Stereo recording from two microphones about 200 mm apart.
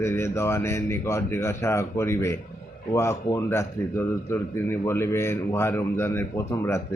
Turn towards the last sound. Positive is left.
turn(degrees=10)  # may be behind; listen again after turning